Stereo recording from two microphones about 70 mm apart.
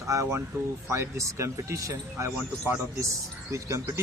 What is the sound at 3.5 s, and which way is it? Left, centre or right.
Speech, right.